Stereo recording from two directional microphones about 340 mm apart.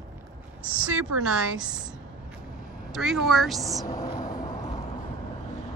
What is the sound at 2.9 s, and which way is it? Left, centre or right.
Speech, centre.